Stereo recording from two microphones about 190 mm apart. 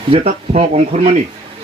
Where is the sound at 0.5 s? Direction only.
35° right (ahead or behind).